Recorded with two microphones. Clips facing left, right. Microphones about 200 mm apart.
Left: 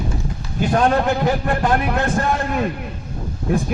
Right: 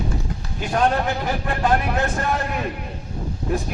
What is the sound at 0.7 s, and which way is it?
A man's voice, 50° left (ahead or behind).